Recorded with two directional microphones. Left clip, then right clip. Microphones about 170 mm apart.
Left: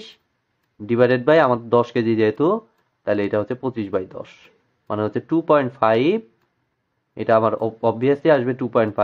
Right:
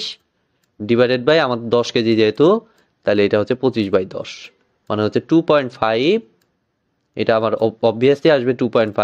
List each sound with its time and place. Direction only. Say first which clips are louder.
0.8 s speech: right 2 dB; 30° right (ahead or behind)